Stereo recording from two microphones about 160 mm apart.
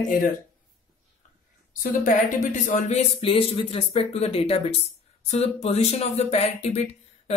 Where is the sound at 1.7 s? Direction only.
55° left (ahead or behind).